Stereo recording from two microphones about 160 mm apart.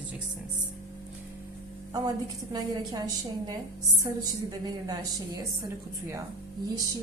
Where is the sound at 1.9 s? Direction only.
20° right (ahead or behind).